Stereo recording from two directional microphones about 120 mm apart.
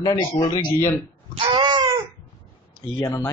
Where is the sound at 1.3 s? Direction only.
45° right (ahead or behind).